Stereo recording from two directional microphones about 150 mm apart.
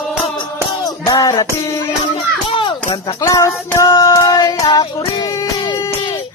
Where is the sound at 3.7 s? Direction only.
20° left (ahead or behind).